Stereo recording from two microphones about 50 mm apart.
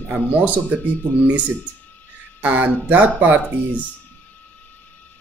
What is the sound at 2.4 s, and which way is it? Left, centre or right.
Speech, right.